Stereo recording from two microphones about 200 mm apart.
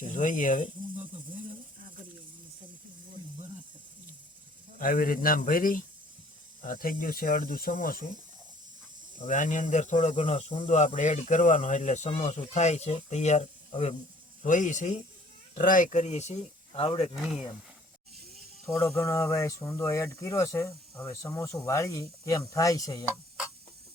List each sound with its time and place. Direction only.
0.0 s speech: 40° left (ahead or behind)
4.8 s speech: 45° left (ahead or behind)
9.1 s speech: 40° left (ahead or behind)
18.7 s speech: 15° left (ahead or behind)